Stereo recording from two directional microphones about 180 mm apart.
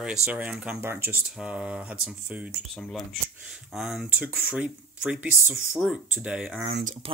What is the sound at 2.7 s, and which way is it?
Speech, 5° left (ahead or behind).